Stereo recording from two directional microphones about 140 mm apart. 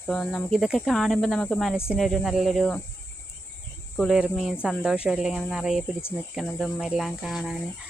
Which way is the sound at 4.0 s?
5° right (ahead or behind).